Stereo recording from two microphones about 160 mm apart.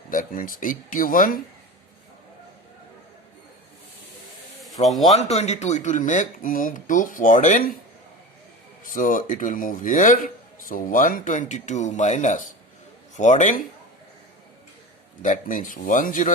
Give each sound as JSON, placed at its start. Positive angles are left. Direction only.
{"t": 0.1, "sound": "speech", "side_deg": 60}
{"t": 4.8, "sound": "a man's voice", "side_deg": 30}
{"t": 5.1, "sound": "speech", "side_deg": 40}
{"t": 8.8, "sound": "speech", "side_deg": 60}
{"t": 15.2, "sound": "speech", "side_deg": 55}